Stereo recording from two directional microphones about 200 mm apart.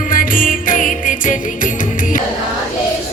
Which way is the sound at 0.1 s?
45° left (ahead or behind).